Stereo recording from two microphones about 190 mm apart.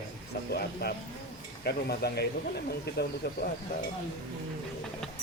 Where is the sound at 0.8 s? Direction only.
60° left (ahead or behind).